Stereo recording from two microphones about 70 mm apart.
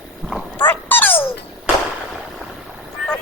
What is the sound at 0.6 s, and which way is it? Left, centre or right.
Dog, left.